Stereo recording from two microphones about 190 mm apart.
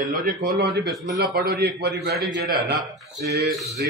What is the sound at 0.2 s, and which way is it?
A man's voice, 45° right (ahead or behind).